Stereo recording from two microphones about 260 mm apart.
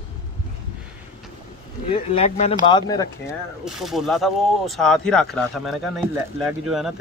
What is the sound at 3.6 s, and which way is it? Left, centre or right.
Speech, centre.